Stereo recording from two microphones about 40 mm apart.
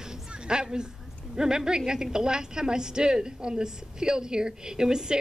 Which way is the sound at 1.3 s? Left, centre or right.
Centre.